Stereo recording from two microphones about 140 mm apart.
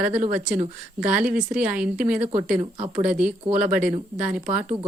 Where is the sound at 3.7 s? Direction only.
10° right (ahead or behind).